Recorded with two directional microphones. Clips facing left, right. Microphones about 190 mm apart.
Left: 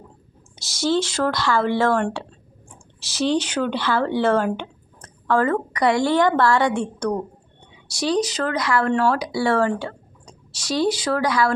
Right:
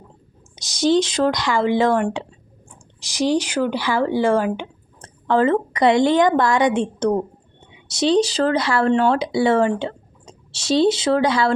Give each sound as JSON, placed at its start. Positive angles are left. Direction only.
{"t": 0.5, "sound": "speech", "side_deg": -20}
{"t": 4.9, "sound": "a woman's voice", "side_deg": -25}